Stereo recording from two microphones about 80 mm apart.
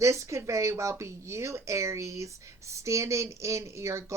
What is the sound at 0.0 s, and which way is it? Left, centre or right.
Speech, right.